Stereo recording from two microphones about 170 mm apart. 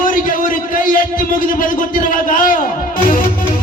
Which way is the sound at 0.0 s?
55° left (ahead or behind).